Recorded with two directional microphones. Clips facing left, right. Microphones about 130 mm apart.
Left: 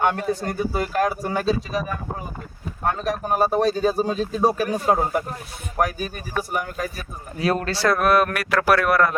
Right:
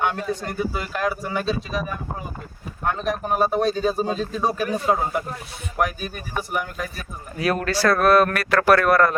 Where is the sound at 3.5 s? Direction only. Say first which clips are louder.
Left 1 dB; 40° left (ahead or behind).